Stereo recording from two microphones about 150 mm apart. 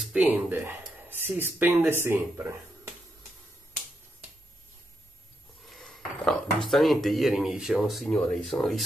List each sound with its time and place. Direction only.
0.0 s speech: 10° right (ahead or behind)
5.7 s a sound: 5° left (ahead or behind)
6.6 s speech: centre (ahead or behind)